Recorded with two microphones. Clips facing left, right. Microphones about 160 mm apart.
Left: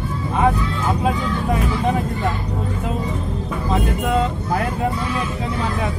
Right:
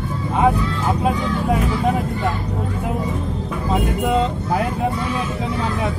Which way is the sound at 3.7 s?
15° right (ahead or behind).